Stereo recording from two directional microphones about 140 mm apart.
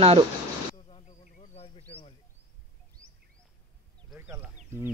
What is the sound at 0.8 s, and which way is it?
Insect, 50° left (ahead or behind).